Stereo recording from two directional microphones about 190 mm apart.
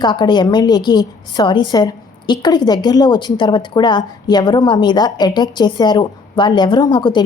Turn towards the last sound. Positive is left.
turn(degrees=25)  # may be behind; listen again after turning